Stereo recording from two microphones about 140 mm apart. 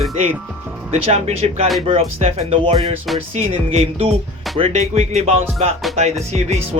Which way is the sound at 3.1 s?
40° right (ahead or behind).